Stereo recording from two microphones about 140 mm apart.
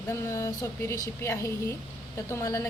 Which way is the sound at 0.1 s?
20° left (ahead or behind).